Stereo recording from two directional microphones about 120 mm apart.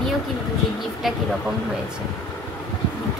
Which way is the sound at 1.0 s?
Centre (ahead or behind).